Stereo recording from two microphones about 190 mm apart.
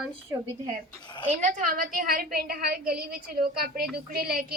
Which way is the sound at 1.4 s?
40° right (ahead or behind).